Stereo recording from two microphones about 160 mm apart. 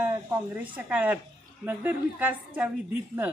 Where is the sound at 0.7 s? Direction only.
10° right (ahead or behind).